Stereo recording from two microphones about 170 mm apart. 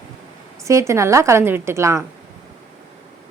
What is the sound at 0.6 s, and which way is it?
A woman's voice, 15° right (ahead or behind).